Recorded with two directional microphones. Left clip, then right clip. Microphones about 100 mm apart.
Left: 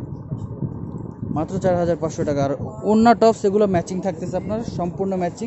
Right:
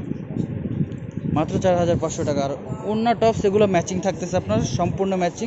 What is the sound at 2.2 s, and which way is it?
Speech, 85° left.